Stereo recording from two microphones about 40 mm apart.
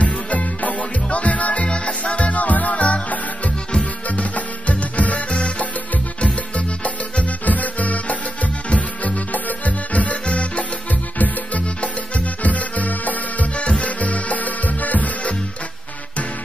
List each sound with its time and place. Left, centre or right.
0.0 s music: left
13.6 s music: left